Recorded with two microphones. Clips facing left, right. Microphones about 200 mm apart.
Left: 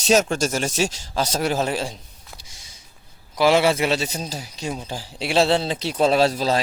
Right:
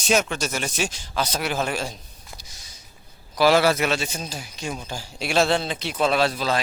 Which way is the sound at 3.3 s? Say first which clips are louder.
Left 1 dB; 25° left (ahead or behind).